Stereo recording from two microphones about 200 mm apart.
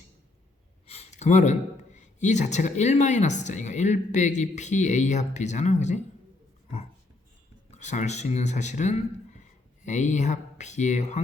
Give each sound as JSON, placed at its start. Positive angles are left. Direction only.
{"t": 0.9, "sound": "speech", "side_deg": 35}
{"t": 7.7, "sound": "speech", "side_deg": 35}